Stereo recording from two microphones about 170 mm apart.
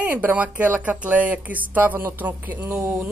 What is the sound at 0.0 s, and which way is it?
Speech, 10° right (ahead or behind).